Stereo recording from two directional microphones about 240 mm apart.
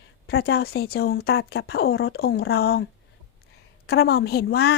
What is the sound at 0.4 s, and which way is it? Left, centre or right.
A woman's voice, left.